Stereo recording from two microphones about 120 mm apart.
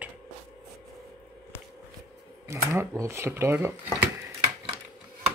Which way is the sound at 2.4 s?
25° right (ahead or behind).